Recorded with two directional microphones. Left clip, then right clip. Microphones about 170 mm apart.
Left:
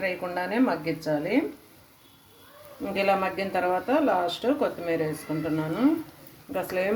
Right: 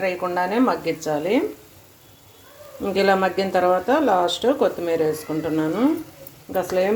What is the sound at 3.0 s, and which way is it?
Speech, 25° right (ahead or behind).